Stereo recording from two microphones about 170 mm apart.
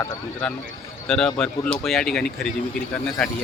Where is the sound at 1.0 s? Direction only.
5° left (ahead or behind).